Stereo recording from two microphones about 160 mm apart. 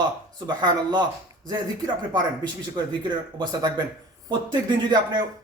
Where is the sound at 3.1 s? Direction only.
25° right (ahead or behind).